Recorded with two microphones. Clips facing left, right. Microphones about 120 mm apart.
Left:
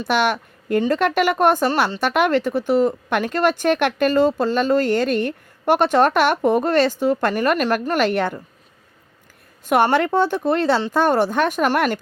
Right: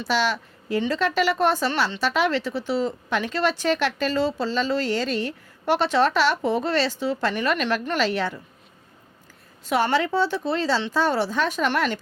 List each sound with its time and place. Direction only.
0.0 s a woman's voice: 55° left (ahead or behind)
9.6 s a woman's voice: 55° left (ahead or behind)